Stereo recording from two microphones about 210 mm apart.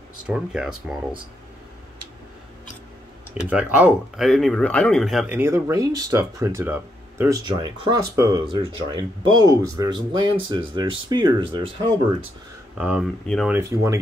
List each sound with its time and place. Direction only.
0.3 s speech: 5° right (ahead or behind)
3.4 s speech: 5° right (ahead or behind)
12.7 s speech: 5° right (ahead or behind)
13.6 s speech: 15° right (ahead or behind)